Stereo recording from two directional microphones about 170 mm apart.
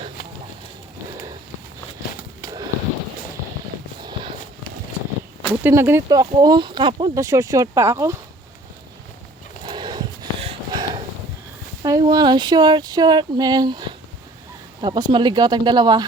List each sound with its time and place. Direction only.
2.4 s bird: 20° right (ahead or behind)
5.6 s speech: 15° right (ahead or behind)
9.6 s a sound: 25° right (ahead or behind)
11.8 s speech: 20° right (ahead or behind)